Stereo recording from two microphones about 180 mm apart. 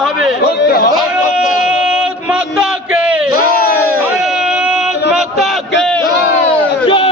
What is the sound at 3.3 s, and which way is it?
Crowd, 55° left (ahead or behind).